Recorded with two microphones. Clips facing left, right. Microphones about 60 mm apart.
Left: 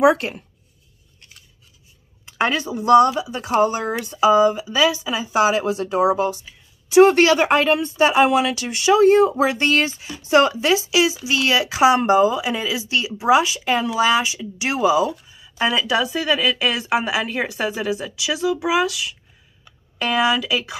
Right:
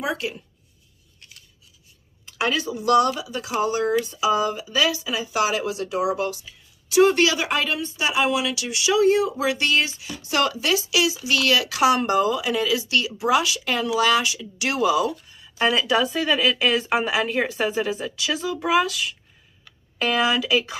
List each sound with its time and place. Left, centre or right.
0.0 s speech: left
2.3 s speech: left
4.3 s speech: centre
7.1 s speech: left
15.6 s speech: centre